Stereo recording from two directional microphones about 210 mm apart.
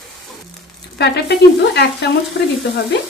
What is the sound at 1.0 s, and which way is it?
A woman's voice, 50° left (ahead or behind).